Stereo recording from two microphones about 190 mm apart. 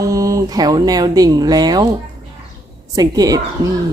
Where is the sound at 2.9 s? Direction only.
20° right (ahead or behind).